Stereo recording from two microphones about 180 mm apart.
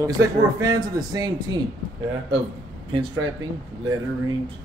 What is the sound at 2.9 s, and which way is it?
Speech, 25° right (ahead or behind).